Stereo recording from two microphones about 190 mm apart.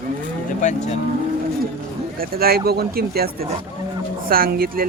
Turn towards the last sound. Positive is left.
turn(degrees=-50)  # may be behind; listen again after turning